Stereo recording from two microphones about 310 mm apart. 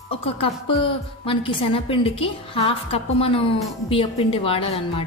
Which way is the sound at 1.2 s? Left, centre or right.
Centre.